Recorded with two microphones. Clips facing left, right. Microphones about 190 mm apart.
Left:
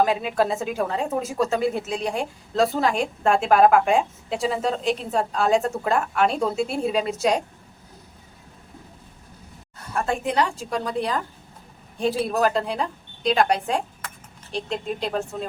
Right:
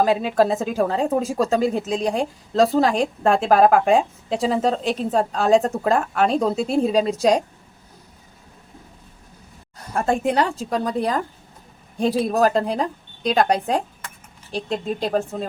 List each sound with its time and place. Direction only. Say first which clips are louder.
0.0 s a woman's voice: right 3 dB; 35° right (ahead or behind)
9.9 s a woman's voice: right 4 dB; 40° right (ahead or behind)